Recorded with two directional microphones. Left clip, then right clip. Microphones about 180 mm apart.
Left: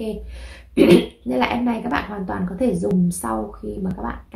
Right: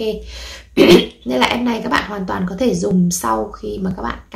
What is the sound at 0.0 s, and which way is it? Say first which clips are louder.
Speech: right 7 dB; 5° right (ahead or behind).